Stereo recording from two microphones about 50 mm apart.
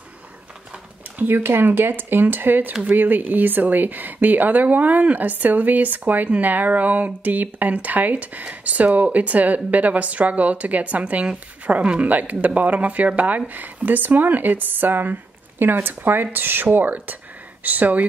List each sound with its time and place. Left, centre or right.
1.2 s speech: right